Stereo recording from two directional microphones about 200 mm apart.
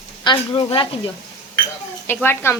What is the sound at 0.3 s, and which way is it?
Speech, 25° left (ahead or behind).